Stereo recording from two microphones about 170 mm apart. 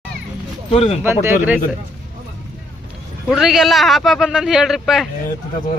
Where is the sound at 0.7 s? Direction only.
35° left (ahead or behind).